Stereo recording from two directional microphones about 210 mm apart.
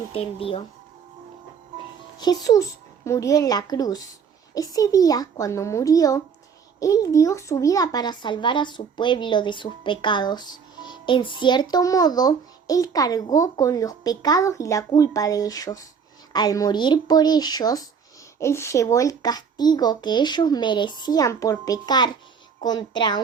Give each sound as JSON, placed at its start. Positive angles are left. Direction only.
{"t": 0.1, "sound": "a child's voice", "side_deg": 25}
{"t": 2.1, "sound": "a child's voice", "side_deg": 20}